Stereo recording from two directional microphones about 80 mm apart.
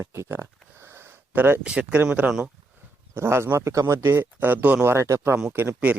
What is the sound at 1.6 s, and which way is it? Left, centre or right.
Speech, centre.